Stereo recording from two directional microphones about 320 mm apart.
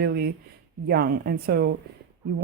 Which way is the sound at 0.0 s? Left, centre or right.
Right.